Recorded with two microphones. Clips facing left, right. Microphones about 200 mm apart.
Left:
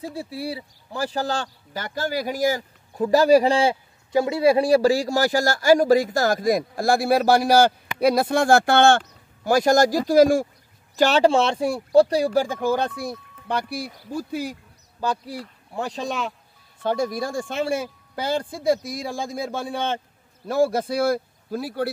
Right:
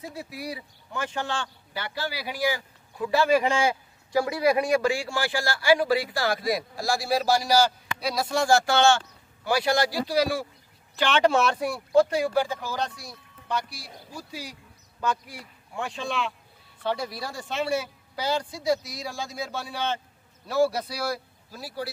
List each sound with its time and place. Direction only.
0.0 s speech: 30° left (ahead or behind)
4.1 s a man's voice: 25° left (ahead or behind); by 10.4 s 50° left (ahead or behind)
11.0 s a man's voice: 35° left (ahead or behind); by 14.6 s 55° left (ahead or behind)
15.0 s a man's voice: 35° left (ahead or behind); by 21.9 s 60° left (ahead or behind)